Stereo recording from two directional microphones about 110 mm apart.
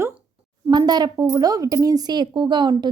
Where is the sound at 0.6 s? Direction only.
40° right (ahead or behind).